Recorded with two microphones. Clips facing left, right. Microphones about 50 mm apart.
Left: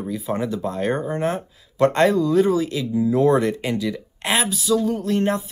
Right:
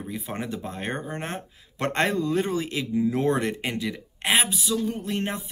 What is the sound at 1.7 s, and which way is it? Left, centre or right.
Speech, right.